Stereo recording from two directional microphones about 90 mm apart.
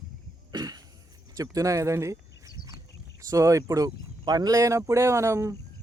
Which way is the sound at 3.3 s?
35° right (ahead or behind).